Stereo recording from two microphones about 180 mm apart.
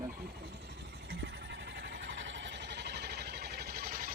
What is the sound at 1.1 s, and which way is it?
Vehicle, 75° right (ahead or behind).